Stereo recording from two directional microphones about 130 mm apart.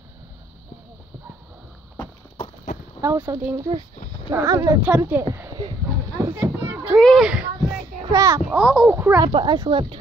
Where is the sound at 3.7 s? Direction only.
35° right (ahead or behind).